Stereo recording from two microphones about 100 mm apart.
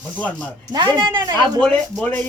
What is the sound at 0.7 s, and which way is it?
Speech, 45° right (ahead or behind).